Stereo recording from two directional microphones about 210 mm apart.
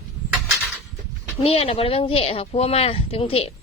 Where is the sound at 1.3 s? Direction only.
30° left (ahead or behind).